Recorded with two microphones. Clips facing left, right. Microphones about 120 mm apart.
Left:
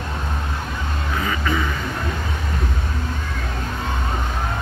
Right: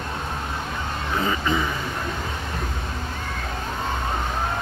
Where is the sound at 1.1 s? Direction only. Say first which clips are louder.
Even; 25° right (ahead or behind).